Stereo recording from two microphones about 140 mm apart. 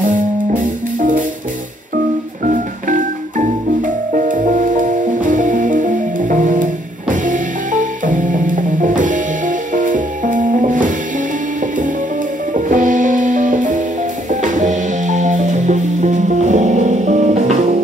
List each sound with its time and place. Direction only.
2.4 s music: 70° right (ahead or behind)
12.5 s music: 65° right (ahead or behind)